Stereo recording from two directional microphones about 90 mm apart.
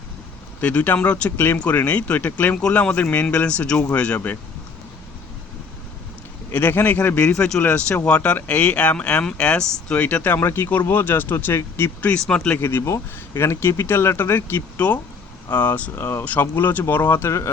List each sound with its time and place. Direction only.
0.6 s speech: 15° left (ahead or behind)
6.5 s speech: 20° left (ahead or behind)
7.6 s speech: 20° left (ahead or behind)
12.1 s speech: 10° left (ahead or behind)
12.6 s speech: 30° left (ahead or behind)
16.0 s speech: 30° left (ahead or behind)
16.2 s speech: 20° left (ahead or behind)